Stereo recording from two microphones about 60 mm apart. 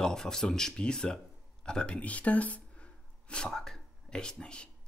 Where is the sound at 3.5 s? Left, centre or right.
Centre.